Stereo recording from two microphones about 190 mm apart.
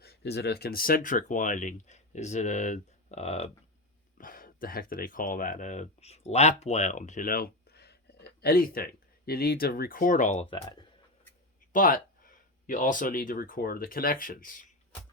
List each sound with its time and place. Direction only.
0.0 s speech: 60° left (ahead or behind); by 3.5 s 35° left (ahead or behind)
4.2 s speech: 45° left (ahead or behind)
10.5 s speech: 25° left (ahead or behind)
11.7 s speech: 45° left (ahead or behind)